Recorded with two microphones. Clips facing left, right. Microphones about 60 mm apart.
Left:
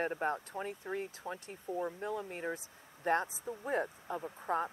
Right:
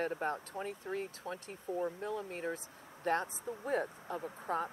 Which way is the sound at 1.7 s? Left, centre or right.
Centre.